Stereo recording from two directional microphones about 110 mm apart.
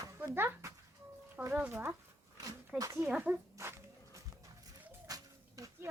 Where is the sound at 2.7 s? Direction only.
30° right (ahead or behind).